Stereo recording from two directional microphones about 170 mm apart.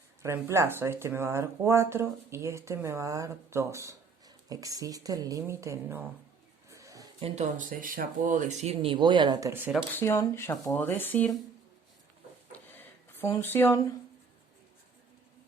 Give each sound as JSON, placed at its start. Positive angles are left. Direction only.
{"t": 0.2, "sound": "speech", "side_deg": -15}
{"t": 6.7, "sound": "a sound", "side_deg": -20}
{"t": 7.2, "sound": "speech", "side_deg": -35}
{"t": 9.5, "sound": "speech", "side_deg": -10}
{"t": 9.9, "sound": "speech", "side_deg": 15}
{"t": 12.5, "sound": "a sound", "side_deg": 10}